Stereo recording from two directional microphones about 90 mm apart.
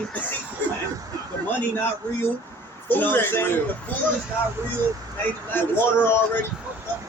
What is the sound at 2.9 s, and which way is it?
Speech, 20° left (ahead or behind).